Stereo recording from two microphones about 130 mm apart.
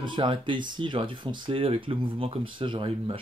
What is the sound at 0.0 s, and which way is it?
Speech, 40° right (ahead or behind).